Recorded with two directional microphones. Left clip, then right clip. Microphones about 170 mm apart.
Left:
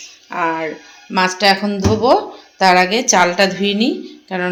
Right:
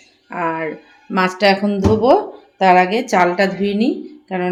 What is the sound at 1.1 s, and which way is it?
Speech, 25° right (ahead or behind).